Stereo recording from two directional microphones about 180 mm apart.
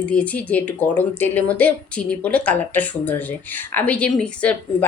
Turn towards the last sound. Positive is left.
turn(degrees=5)  # may be behind; listen again after turning